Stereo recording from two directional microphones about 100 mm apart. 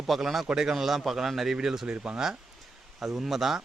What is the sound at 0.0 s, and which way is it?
Speech, centre (ahead or behind).